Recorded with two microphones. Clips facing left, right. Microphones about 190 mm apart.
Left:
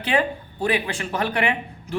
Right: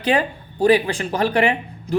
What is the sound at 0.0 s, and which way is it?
Speech, 35° right (ahead or behind).